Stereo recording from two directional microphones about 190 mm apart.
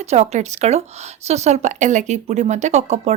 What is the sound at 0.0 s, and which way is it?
A woman's voice, 35° right (ahead or behind).